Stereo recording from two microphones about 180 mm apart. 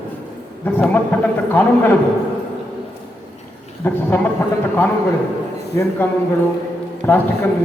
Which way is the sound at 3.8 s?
15° left (ahead or behind).